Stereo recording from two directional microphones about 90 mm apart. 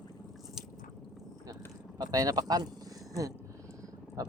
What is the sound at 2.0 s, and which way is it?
Speech, 45° right (ahead or behind).